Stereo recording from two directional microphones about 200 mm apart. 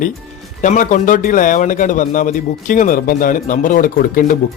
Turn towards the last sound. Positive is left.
turn(degrees=45)  # may be behind; listen again after turning